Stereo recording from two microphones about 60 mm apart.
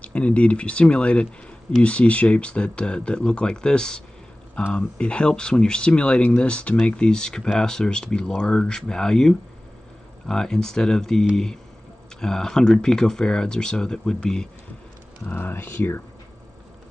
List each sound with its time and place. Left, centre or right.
0.0 s speech: left
15.2 s speech: left